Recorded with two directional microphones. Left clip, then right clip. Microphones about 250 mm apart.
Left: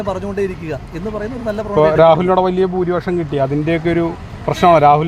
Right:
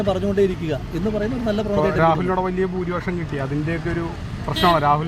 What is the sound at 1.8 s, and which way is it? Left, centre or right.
Speech, left.